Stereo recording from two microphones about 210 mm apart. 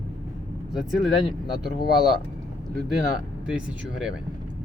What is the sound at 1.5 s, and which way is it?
Speech, 50° left (ahead or behind).